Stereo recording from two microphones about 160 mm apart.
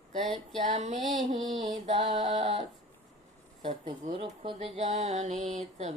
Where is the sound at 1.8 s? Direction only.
40° right (ahead or behind).